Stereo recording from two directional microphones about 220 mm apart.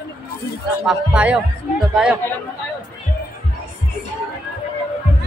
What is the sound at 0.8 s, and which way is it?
A man's voice, 5° right (ahead or behind).